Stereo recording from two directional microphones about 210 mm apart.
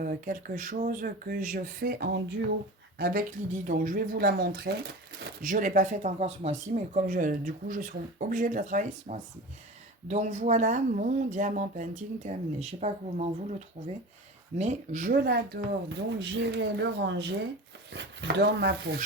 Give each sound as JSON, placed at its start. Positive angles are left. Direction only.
{"t": 0.0, "sound": "speech", "side_deg": -40}
{"t": 14.6, "sound": "speech", "side_deg": -35}